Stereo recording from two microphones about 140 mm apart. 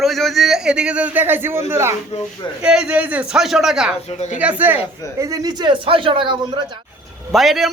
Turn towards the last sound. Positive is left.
turn(degrees=0)  # may be behind; listen again after turning